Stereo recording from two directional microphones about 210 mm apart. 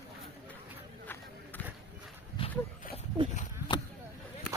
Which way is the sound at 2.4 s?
25° left (ahead or behind).